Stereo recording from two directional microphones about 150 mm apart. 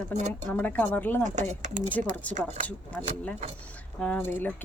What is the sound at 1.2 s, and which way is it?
Speech, 50° right (ahead or behind).